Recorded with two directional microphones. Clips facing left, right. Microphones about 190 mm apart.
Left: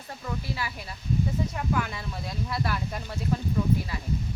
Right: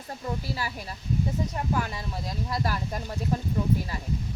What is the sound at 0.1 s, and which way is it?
Speech, 40° right (ahead or behind).